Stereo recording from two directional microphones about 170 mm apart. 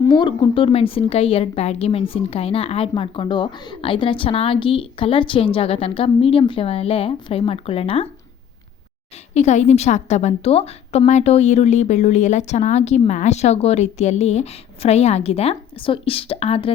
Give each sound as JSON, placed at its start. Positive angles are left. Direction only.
{"t": 0.0, "sound": "a woman's voice", "side_deg": 25}
{"t": 9.3, "sound": "a woman's voice", "side_deg": 40}